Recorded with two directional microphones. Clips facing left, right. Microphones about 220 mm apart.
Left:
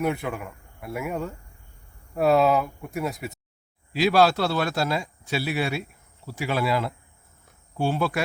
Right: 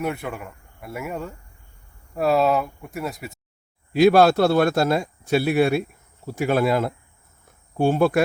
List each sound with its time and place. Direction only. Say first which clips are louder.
0.0 s speech: left 1 dB; centre (ahead or behind)
3.9 s speech: right 5 dB; 55° right (ahead or behind)
7.4 s cricket: right 6 dB; 50° right (ahead or behind)